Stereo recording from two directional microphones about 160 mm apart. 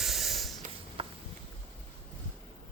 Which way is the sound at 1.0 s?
35° right (ahead or behind).